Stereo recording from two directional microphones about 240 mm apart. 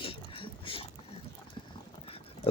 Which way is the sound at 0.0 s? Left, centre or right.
Left.